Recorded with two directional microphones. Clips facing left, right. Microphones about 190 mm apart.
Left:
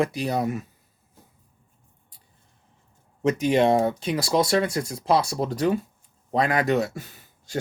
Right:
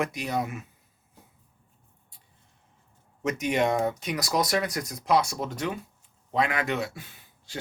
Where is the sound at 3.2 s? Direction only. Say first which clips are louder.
Left 6 dB; 30° left (ahead or behind).